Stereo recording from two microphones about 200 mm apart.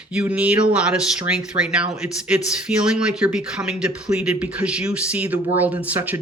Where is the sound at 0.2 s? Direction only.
5° right (ahead or behind).